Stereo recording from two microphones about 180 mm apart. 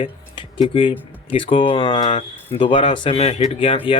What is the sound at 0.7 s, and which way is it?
Speech, 30° left (ahead or behind).